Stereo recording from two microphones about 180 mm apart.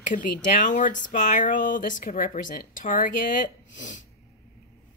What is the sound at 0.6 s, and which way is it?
Speech, 45° left (ahead or behind).